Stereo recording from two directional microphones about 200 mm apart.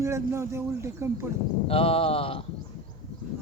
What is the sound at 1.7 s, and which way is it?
Speech, 30° left (ahead or behind).